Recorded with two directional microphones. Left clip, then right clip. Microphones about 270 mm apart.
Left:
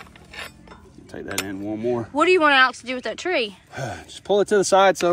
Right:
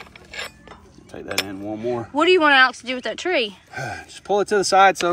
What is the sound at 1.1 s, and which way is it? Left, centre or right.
Speech, centre.